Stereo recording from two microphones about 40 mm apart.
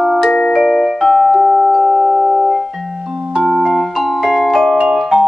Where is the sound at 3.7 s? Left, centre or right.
Centre.